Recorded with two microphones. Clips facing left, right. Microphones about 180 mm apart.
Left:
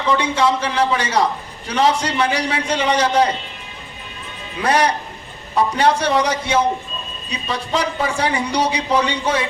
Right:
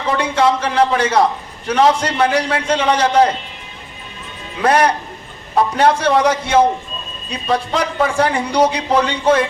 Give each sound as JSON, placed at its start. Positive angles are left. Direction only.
{"t": 0.2, "sound": "speech", "side_deg": -55}
{"t": 4.6, "sound": "speech", "side_deg": -55}